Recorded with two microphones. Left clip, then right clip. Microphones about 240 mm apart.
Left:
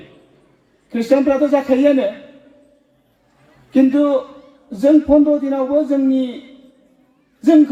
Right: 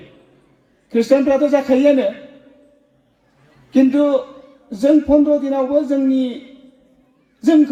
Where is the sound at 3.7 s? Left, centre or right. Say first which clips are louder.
Even; right.